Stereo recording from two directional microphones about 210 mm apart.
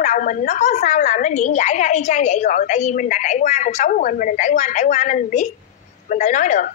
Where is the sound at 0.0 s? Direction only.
40° left (ahead or behind).